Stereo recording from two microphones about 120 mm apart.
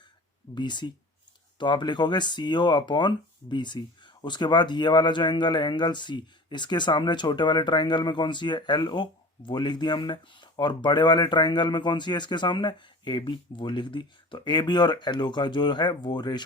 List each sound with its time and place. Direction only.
0.5 s speech: 40° left (ahead or behind)